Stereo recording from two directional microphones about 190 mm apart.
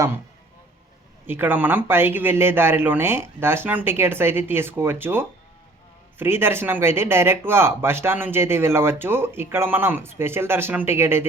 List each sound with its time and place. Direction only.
1.3 s speech: 10° right (ahead or behind)